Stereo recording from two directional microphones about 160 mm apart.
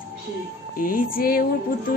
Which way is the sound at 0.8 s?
60° left (ahead or behind).